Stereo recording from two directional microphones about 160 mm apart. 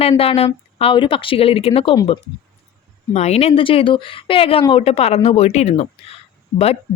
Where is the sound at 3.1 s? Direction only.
40° left (ahead or behind).